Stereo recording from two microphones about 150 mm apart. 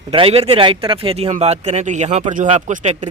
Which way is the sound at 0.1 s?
40° right (ahead or behind).